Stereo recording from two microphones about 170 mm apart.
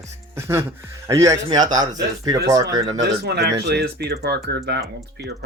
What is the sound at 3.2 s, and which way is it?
Speech, 75° right (ahead or behind).